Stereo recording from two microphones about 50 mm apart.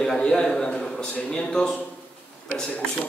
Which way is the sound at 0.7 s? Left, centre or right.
Left.